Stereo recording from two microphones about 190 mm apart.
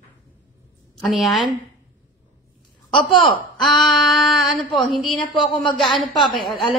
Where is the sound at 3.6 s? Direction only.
Centre (ahead or behind).